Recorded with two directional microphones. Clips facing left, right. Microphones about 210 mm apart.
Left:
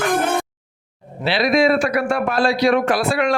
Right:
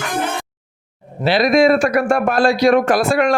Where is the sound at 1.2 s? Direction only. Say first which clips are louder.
Right 3 dB; 45° right (ahead or behind).